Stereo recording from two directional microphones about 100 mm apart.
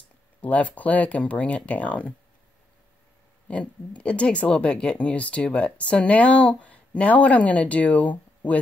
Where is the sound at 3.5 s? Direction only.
15° left (ahead or behind).